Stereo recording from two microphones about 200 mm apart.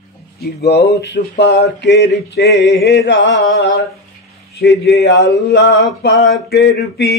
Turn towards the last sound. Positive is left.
turn(degrees=55)  # may be behind; listen again after turning